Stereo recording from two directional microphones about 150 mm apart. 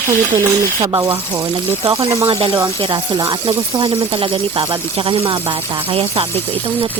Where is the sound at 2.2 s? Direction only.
40° right (ahead or behind).